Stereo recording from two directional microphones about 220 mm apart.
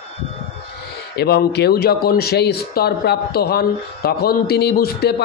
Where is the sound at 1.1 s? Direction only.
50° left (ahead or behind).